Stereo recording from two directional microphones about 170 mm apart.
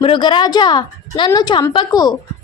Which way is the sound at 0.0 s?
30° left (ahead or behind).